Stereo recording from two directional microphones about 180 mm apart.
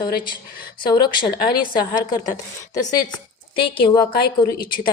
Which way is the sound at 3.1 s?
25° left (ahead or behind).